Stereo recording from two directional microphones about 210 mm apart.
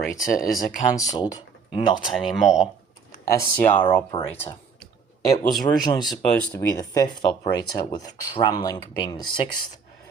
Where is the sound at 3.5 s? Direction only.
10° left (ahead or behind).